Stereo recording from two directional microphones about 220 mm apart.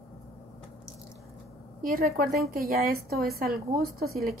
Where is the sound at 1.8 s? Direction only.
40° right (ahead or behind).